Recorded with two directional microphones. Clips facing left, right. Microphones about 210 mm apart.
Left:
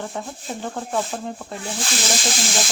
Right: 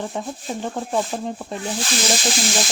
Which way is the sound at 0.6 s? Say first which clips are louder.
Right 2 dB; 20° right (ahead or behind).